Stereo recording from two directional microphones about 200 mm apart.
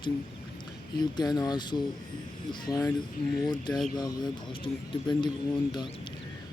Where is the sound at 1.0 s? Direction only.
20° left (ahead or behind).